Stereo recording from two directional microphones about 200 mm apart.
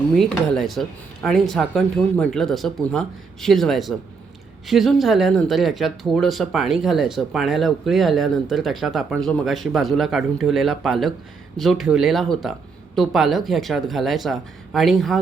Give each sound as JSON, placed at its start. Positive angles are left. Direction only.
{"t": 0.2, "sound": "speech", "side_deg": 0}